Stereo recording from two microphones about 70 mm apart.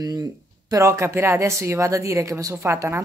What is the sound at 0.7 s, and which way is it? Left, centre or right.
Speech, right.